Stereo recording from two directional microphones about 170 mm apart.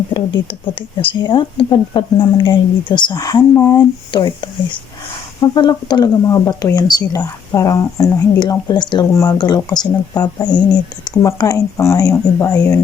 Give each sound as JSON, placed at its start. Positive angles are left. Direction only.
{"t": 0.6, "sound": "speech", "side_deg": 30}